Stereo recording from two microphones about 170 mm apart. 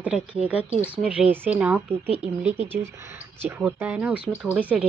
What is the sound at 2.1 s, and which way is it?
Speech, 40° right (ahead or behind).